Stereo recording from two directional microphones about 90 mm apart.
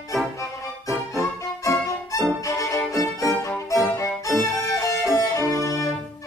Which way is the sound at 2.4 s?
35° left (ahead or behind).